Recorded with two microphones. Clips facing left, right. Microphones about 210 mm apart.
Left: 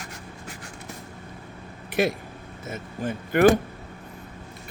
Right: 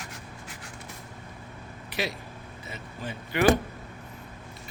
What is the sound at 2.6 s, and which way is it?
Speech, 50° left (ahead or behind).